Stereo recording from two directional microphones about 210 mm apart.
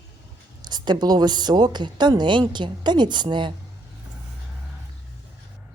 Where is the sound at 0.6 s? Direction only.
20° right (ahead or behind).